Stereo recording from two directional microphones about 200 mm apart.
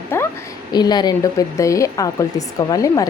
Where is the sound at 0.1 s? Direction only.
10° left (ahead or behind).